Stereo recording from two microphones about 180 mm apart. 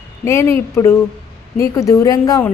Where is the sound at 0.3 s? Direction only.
15° left (ahead or behind).